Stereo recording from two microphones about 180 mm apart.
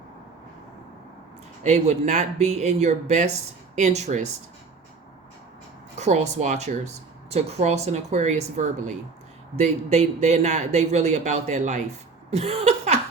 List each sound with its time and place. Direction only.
1.6 s speech: 40° right (ahead or behind)
6.0 s speech: 40° right (ahead or behind)